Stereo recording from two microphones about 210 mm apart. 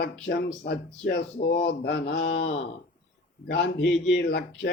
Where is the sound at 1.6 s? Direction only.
55° left (ahead or behind).